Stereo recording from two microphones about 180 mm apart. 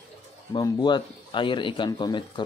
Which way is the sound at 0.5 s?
25° left (ahead or behind).